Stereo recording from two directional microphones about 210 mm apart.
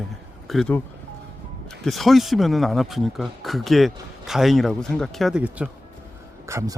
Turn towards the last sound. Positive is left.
turn(degrees=-15)  # may be behind; listen again after turning